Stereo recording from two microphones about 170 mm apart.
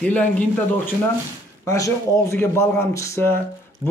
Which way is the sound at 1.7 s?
20° left (ahead or behind).